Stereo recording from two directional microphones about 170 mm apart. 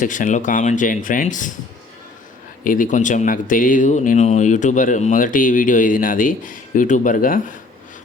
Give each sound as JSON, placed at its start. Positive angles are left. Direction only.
{"t": 0.0, "sound": "speech", "side_deg": 50}
{"t": 2.6, "sound": "speech", "side_deg": 50}